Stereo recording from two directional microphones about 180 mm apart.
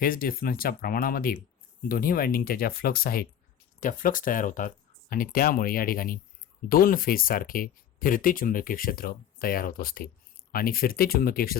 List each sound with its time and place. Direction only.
0.0 s speech: 55° left (ahead or behind)